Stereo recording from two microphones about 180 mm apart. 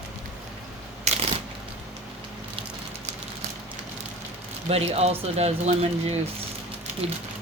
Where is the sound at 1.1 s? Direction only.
40° right (ahead or behind).